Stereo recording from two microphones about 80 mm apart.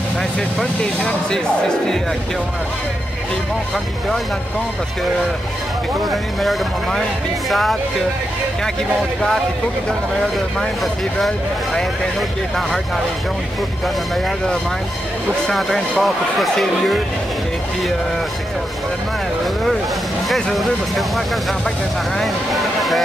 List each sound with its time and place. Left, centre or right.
0.6 s speech: centre
6.0 s speech: centre
10.6 s speech: centre
15.4 s speech: centre
20.2 s speech: centre
22.2 s speech: centre